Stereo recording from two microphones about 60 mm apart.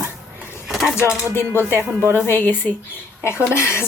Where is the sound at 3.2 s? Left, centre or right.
Left.